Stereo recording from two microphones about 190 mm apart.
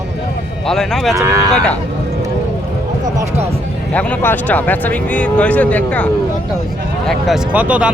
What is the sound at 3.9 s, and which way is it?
Speech, 10° left (ahead or behind).